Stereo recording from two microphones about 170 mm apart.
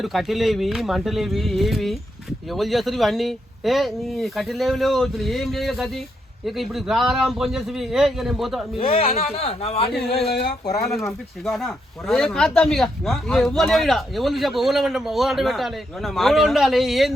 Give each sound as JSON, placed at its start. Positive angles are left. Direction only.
{"t": 0.0, "sound": "speech", "side_deg": 0}
{"t": 8.8, "sound": "speech", "side_deg": 35}
{"t": 10.2, "sound": "a sound", "side_deg": 70}
{"t": 10.8, "sound": "speech", "side_deg": 0}